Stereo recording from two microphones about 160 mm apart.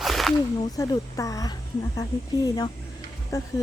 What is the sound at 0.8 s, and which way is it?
A woman's voice, 20° left (ahead or behind).